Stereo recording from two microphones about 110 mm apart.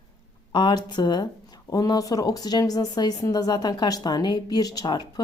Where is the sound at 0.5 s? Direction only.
40° left (ahead or behind).